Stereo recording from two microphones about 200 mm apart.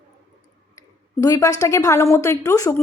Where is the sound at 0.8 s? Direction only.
15° left (ahead or behind).